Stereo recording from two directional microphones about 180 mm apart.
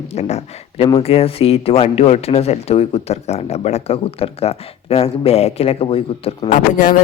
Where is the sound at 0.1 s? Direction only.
35° left (ahead or behind).